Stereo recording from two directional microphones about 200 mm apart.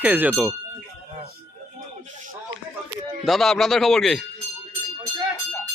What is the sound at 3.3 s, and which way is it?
Speech, centre (ahead or behind).